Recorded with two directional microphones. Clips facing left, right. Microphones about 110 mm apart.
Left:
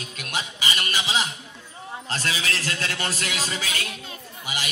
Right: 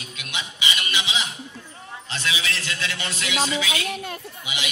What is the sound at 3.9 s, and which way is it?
Speech, 60° right (ahead or behind).